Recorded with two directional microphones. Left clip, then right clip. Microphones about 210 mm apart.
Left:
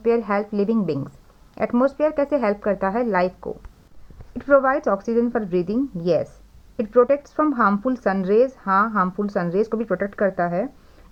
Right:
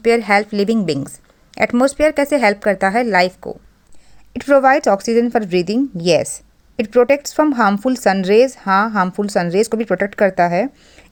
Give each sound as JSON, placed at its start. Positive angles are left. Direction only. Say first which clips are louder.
{"t": 0.0, "sound": "speech", "louder": "right 7 dB", "side_deg": -35}